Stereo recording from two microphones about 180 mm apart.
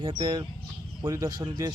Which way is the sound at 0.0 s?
25° right (ahead or behind).